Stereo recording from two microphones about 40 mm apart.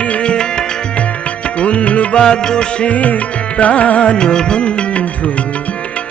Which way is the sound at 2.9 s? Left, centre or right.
Left.